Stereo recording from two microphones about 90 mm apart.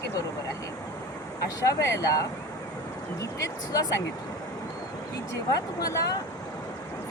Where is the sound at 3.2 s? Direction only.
40° left (ahead or behind).